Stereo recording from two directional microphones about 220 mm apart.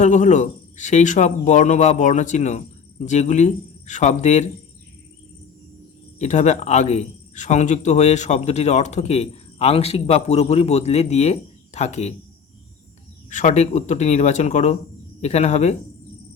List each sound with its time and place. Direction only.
0.0 s speech: 35° left (ahead or behind)
6.1 s speech: 30° left (ahead or behind)
13.3 s speech: 35° left (ahead or behind)